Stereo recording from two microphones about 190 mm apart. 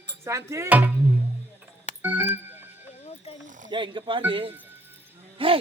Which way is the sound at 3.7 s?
25° right (ahead or behind).